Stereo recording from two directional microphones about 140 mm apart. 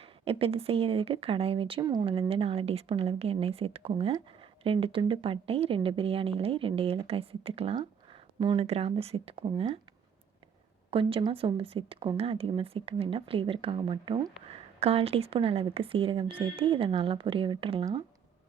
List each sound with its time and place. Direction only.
0.0 s a woman's voice: 45° right (ahead or behind)
1.8 s speech: 30° right (ahead or behind)
2.0 s a woman's voice: 40° right (ahead or behind)
10.9 s speech: 40° right (ahead or behind)